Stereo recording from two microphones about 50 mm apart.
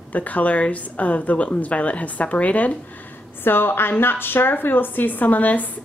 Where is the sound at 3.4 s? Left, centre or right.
Left.